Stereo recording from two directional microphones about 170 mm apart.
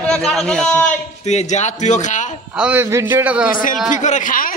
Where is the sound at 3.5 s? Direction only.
55° left (ahead or behind).